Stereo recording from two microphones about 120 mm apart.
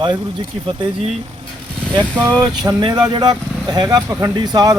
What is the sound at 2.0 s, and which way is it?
Speech, 35° right (ahead or behind).